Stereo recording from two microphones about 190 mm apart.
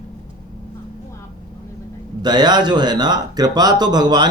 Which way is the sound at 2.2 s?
20° right (ahead or behind).